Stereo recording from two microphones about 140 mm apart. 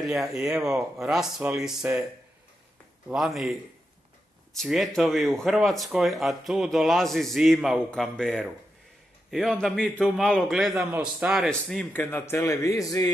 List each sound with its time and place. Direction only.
0.0 s speech: centre (ahead or behind)
3.1 s speech: centre (ahead or behind)
4.6 s speech: centre (ahead or behind)
11.9 s a man's voice: 15° left (ahead or behind)